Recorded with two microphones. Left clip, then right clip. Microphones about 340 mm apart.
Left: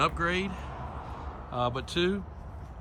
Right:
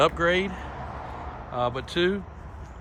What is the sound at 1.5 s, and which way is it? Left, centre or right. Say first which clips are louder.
Speech: right 3 dB; centre.